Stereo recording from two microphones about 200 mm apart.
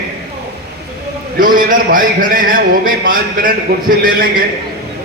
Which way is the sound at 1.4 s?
45° right (ahead or behind).